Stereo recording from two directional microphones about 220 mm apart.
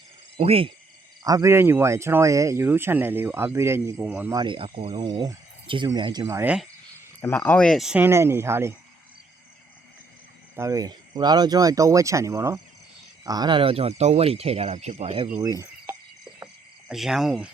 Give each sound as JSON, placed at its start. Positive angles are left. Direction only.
{"t": 0.3, "sound": "speech", "side_deg": -25}
{"t": 1.2, "sound": "speech", "side_deg": -15}
{"t": 4.4, "sound": "speech", "side_deg": -20}
{"t": 7.2, "sound": "speech", "side_deg": 10}
{"t": 10.5, "sound": "speech", "side_deg": -15}
{"t": 15.4, "sound": "a sound", "side_deg": -15}
{"t": 16.9, "sound": "speech", "side_deg": 0}